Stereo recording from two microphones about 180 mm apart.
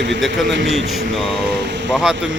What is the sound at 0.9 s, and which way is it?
Speech, centre (ahead or behind).